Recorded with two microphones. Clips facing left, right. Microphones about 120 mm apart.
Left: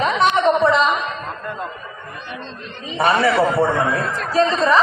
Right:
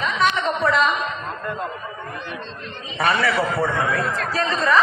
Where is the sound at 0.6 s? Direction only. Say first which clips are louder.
Even; 20° left (ahead or behind).